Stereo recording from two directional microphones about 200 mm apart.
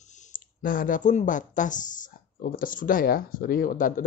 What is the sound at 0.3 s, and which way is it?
Speech, 45° left (ahead or behind).